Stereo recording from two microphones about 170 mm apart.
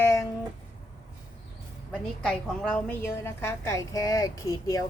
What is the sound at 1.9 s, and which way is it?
A woman's voice, 5° left (ahead or behind).